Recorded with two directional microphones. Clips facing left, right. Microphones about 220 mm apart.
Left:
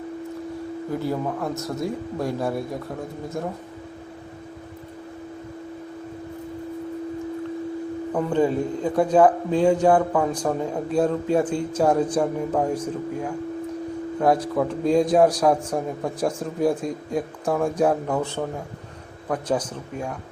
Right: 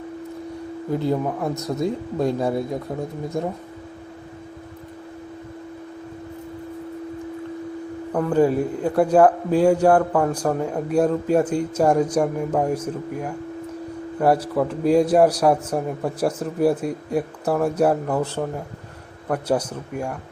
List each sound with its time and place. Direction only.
0.9 s a man's voice: 20° right (ahead or behind)
8.3 s a man's voice: 10° right (ahead or behind)